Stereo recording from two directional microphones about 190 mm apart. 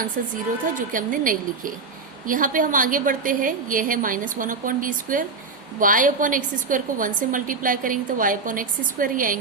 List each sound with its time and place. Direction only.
0.8 s a woman's voice: 45° right (ahead or behind)